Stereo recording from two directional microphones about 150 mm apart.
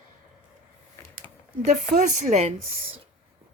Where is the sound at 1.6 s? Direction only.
55° right (ahead or behind).